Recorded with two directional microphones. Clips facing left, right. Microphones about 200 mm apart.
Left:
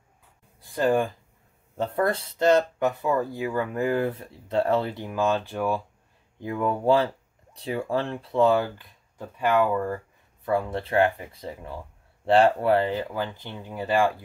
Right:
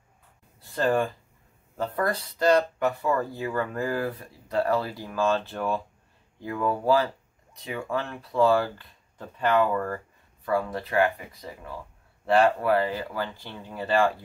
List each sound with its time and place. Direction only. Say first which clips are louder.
0.6 s speech: left 2 dB; 15° left (ahead or behind)
1.8 s speech: left 3 dB; 25° left (ahead or behind)
6.4 s speech: left 2 dB; 20° left (ahead or behind)
10.4 s speech: left 1 dB; 25° left (ahead or behind)